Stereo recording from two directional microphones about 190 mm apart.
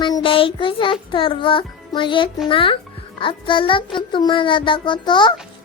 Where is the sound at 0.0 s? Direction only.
25° left (ahead or behind).